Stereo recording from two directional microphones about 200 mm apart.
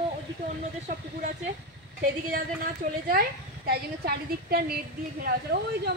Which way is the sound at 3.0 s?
50° right (ahead or behind).